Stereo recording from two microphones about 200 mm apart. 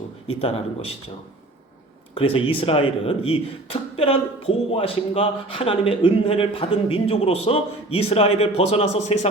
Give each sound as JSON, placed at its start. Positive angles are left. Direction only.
{"t": 0.3, "sound": "speech", "side_deg": 30}
{"t": 2.1, "sound": "a man's voice", "side_deg": 25}